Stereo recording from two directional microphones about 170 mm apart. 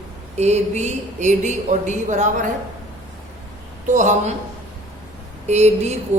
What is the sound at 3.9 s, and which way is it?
Speech, 45° right (ahead or behind).